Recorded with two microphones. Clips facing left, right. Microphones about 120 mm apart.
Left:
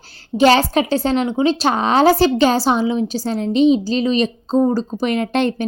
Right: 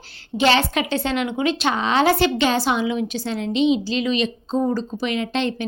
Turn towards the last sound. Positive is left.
turn(degrees=50)  # may be behind; listen again after turning